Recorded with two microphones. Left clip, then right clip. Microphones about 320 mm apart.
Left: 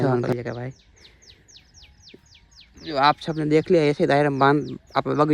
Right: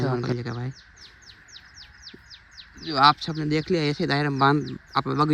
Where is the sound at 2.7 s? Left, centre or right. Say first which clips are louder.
Right 1 dB; centre.